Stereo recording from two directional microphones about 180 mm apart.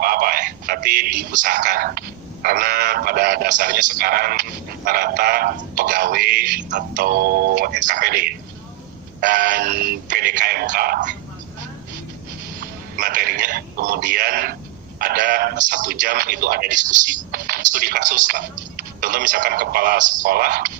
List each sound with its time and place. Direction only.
0.0 s speech: 55° right (ahead or behind)
12.5 s speech: 50° right (ahead or behind)